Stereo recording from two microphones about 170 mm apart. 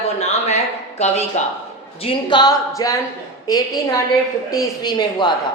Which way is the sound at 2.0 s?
25° left (ahead or behind).